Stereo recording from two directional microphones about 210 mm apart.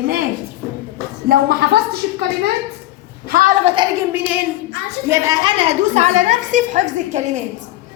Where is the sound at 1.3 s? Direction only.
50° right (ahead or behind).